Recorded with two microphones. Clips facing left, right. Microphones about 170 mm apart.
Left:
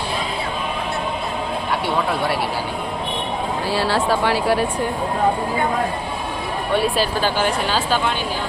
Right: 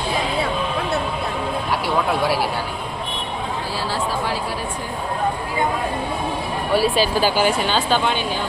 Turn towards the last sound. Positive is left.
turn(degrees=-10)  # may be behind; listen again after turning